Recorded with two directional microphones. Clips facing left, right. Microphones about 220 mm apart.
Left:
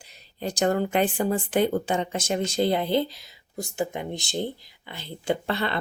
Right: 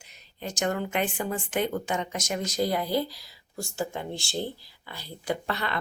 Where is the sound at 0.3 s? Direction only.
35° left (ahead or behind).